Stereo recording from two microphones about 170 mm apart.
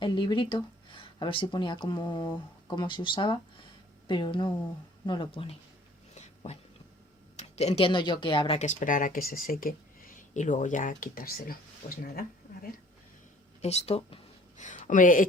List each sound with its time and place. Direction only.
0.0 s speech: 30° left (ahead or behind)
6.1 s dog: 40° left (ahead or behind)
7.3 s speech: 40° left (ahead or behind)
8.5 s speech: 45° left (ahead or behind)
10.2 s speech: 45° left (ahead or behind)
13.6 s speech: 40° left (ahead or behind)